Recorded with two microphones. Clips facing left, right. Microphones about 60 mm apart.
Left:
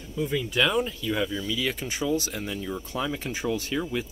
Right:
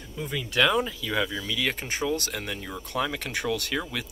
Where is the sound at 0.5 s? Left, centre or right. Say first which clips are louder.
Right 3 dB; right.